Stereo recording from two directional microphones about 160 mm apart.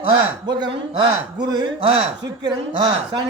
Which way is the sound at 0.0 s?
25° right (ahead or behind).